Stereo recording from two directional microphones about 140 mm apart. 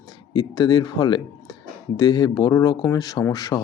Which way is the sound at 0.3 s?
30° left (ahead or behind).